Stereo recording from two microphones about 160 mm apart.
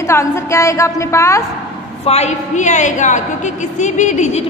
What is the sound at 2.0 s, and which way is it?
A woman's voice, 40° left (ahead or behind).